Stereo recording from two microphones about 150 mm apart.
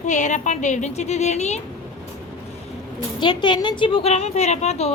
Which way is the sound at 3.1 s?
30° left (ahead or behind).